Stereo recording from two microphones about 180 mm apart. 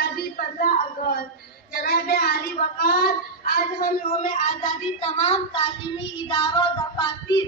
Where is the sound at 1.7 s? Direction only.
60° left (ahead or behind).